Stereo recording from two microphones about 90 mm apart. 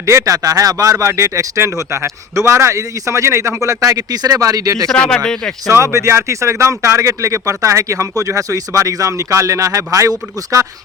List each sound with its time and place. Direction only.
0.0 s speech: 35° right (ahead or behind)
4.9 s speech: 10° left (ahead or behind)
5.7 s speech: 35° right (ahead or behind)